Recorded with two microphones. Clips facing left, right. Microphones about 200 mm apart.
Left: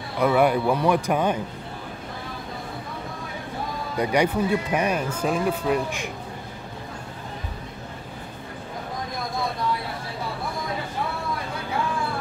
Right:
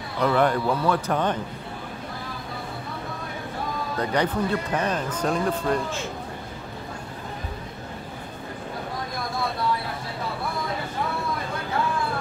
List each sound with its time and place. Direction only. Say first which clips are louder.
0.2 s speech: left 2 dB; 10° left (ahead or behind)
3.9 s speech: left 3 dB; 10° left (ahead or behind)